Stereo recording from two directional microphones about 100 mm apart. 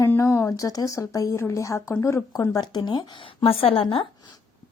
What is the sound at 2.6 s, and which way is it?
Speech, 45° left (ahead or behind).